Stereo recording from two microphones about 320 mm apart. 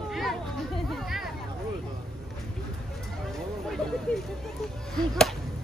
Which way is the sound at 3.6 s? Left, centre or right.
Centre.